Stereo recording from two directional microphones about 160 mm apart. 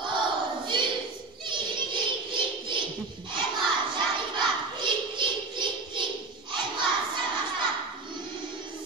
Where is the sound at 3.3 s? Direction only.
30° right (ahead or behind).